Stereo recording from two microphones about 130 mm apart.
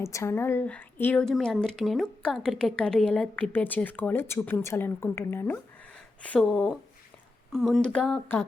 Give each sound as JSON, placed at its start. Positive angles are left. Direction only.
{"t": 0.0, "sound": "a woman's voice", "side_deg": 20}
{"t": 1.2, "sound": "a woman's voice", "side_deg": 5}